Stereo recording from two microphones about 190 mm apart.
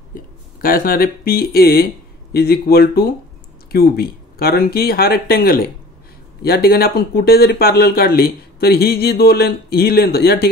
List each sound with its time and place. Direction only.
0.1 s speech: 50° left (ahead or behind)